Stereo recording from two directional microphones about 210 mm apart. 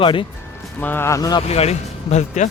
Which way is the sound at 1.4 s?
30° left (ahead or behind).